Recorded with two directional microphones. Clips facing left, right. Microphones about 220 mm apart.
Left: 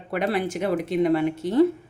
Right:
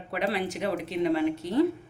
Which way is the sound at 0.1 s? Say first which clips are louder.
Left 4 dB; 50° left (ahead or behind).